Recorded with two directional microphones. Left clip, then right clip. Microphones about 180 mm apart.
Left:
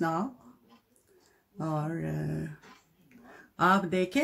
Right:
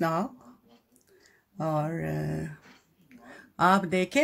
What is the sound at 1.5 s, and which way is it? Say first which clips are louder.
Speech: right 4 dB; 40° right (ahead or behind).